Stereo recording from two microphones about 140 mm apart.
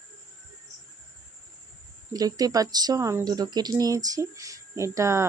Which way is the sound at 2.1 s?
25° right (ahead or behind).